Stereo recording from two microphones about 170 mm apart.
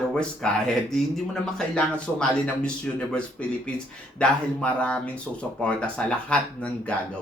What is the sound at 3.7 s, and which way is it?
Speech, 5° left (ahead or behind).